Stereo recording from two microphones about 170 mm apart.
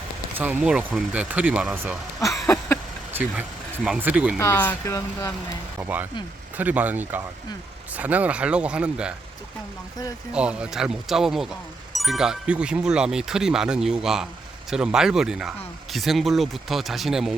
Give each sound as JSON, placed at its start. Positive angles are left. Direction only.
{"t": 0.3, "sound": "speech", "side_deg": -10}
{"t": 3.1, "sound": "speech", "side_deg": -10}
{"t": 4.4, "sound": "speech", "side_deg": 15}
{"t": 5.7, "sound": "speech", "side_deg": -10}
{"t": 10.3, "sound": "speech", "side_deg": -5}